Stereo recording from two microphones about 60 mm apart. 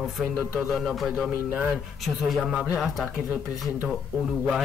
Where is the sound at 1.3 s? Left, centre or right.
Right.